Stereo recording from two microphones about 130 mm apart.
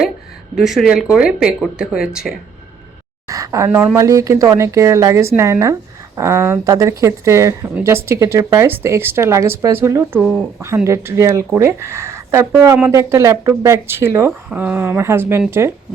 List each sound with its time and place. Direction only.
0.5 s speech: centre (ahead or behind)
3.2 s speech: 25° right (ahead or behind)
10.2 s speech: 5° right (ahead or behind)
10.8 s speech: 20° right (ahead or behind)